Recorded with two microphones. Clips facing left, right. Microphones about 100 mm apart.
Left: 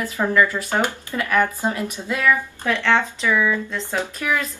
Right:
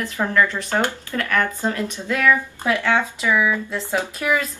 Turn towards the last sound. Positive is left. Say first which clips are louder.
# right 2 dB
turn(degrees=-15)  # may be behind; listen again after turning